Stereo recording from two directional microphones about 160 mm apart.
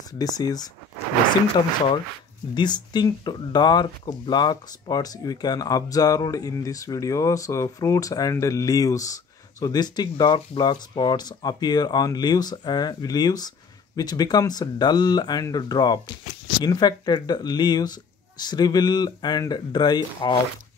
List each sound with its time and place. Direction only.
0.2 s speech: 25° left (ahead or behind)
2.5 s speech: 25° left (ahead or behind)